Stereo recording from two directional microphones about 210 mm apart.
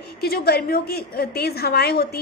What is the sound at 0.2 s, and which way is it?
A woman's voice, 45° left (ahead or behind).